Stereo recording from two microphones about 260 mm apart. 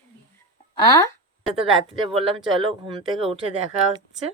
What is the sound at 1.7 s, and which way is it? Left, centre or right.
Speech, right.